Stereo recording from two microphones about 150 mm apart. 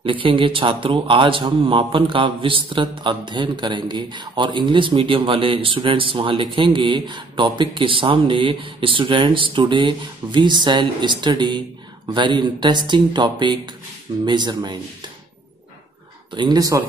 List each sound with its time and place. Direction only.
0.0 s a man's voice: 35° right (ahead or behind)
16.3 s speech: 25° right (ahead or behind)